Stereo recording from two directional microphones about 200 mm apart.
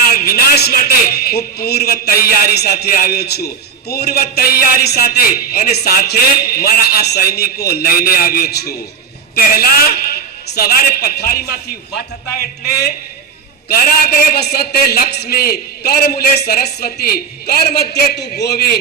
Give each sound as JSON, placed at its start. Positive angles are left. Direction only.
{"t": 0.2, "sound": "a man's voice", "side_deg": 50}
{"t": 13.7, "sound": "a man's voice", "side_deg": 50}